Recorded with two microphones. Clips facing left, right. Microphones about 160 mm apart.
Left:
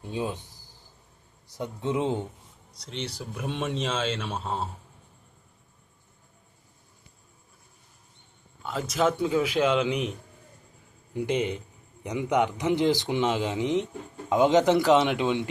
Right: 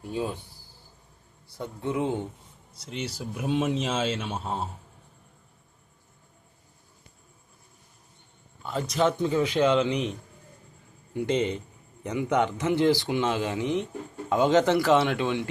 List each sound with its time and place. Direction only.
0.0 s speech: 20° left (ahead or behind)
2.8 s a man's voice: 5° right (ahead or behind)
8.6 s a man's voice: centre (ahead or behind)
11.1 s speech: 15° left (ahead or behind)